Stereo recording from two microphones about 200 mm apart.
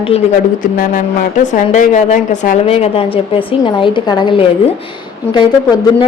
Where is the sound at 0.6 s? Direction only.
40° left (ahead or behind).